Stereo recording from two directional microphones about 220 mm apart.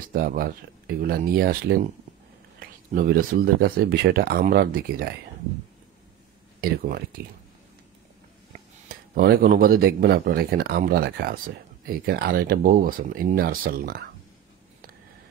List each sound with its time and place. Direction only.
0.1 s speech: 40° right (ahead or behind)
6.6 s speech: 40° right (ahead or behind)
9.1 s speech: 45° right (ahead or behind)